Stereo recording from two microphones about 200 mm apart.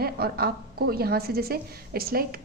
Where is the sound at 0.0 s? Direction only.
50° right (ahead or behind).